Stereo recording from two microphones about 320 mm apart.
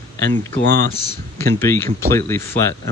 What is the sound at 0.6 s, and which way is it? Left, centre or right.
Speech, right.